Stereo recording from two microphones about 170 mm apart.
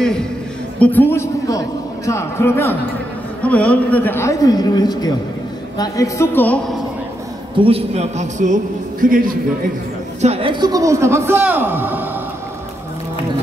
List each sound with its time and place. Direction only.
0.7 s a man's voice: 10° left (ahead or behind)
7.5 s a man's voice: 35° right (ahead or behind)
9.0 s a man's voice: 55° right (ahead or behind)
10.2 s a man's voice: 35° right (ahead or behind); by 12.1 s 10° right (ahead or behind)